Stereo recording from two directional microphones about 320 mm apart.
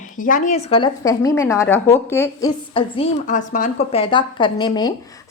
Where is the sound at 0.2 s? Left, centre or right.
Left.